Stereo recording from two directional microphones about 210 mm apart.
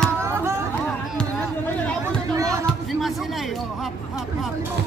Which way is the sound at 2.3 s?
15° right (ahead or behind).